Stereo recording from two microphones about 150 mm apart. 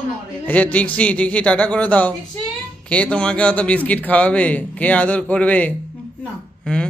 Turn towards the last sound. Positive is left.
turn(degrees=5)  # may be behind; listen again after turning